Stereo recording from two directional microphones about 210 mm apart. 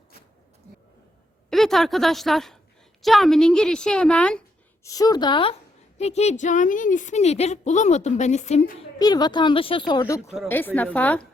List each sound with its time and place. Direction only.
1.5 s a woman's voice: centre (ahead or behind)
4.9 s a woman's voice: 15° left (ahead or behind); by 8.7 s 35° left (ahead or behind)
9.0 s speech: 20° left (ahead or behind)
10.5 s a woman's voice: 10° left (ahead or behind)